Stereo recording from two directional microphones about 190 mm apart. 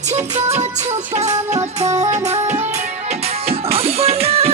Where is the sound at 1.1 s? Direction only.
35° right (ahead or behind).